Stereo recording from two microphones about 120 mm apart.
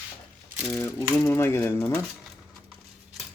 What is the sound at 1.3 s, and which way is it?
Coin, 20° left (ahead or behind).